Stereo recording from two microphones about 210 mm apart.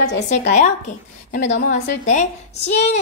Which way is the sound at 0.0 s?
35° left (ahead or behind).